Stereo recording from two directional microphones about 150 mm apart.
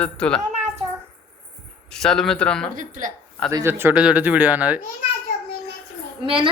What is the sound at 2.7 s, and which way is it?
Speech, 60° right (ahead or behind).